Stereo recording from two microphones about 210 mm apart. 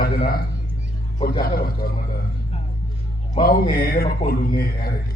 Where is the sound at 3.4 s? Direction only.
45° left (ahead or behind).